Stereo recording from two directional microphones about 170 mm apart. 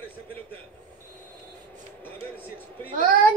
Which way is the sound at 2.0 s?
10° left (ahead or behind).